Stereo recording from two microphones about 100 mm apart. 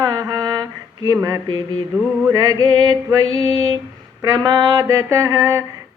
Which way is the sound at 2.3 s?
35° right (ahead or behind).